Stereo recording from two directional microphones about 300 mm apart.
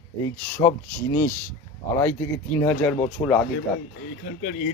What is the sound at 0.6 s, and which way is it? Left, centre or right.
Speech, centre.